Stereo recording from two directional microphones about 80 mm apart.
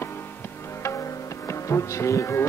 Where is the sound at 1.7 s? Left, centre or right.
Left.